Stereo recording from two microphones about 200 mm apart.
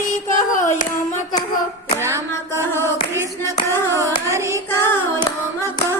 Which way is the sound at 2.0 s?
15° right (ahead or behind).